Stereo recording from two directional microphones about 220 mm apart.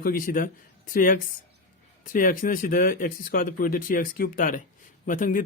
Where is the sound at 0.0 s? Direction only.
40° left (ahead or behind).